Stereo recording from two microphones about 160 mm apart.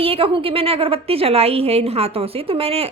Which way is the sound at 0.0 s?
35° right (ahead or behind).